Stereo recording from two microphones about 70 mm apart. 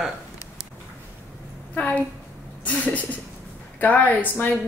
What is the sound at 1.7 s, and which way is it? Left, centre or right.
A woman's voice, left.